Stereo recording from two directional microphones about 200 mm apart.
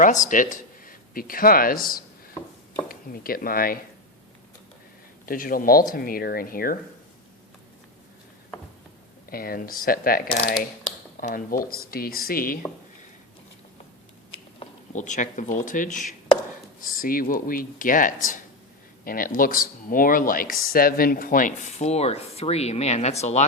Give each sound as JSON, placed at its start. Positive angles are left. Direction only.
{"t": 0.0, "sound": "speech", "side_deg": 40}
{"t": 5.2, "sound": "speech", "side_deg": 45}
{"t": 9.3, "sound": "speech", "side_deg": 45}
{"t": 14.6, "sound": "speech", "side_deg": 40}